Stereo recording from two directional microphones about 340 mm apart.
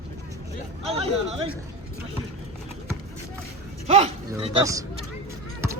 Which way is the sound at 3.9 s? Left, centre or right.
Centre.